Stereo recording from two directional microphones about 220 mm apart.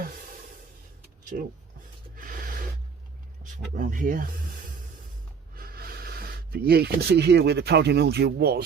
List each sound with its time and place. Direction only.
1.3 s speech: 40° right (ahead or behind)
2.1 s a sound: 40° right (ahead or behind)
3.4 s speech: 35° right (ahead or behind)